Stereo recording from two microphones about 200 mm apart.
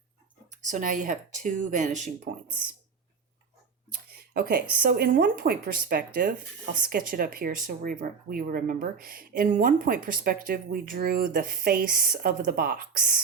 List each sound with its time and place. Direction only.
0.5 s speech: 40° right (ahead or behind)
4.4 s speech: 45° right (ahead or behind)